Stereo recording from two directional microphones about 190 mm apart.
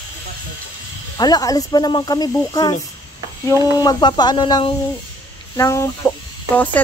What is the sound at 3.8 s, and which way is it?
Speech, 20° left (ahead or behind).